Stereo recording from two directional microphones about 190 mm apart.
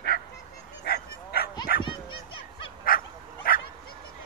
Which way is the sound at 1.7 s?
50° left (ahead or behind).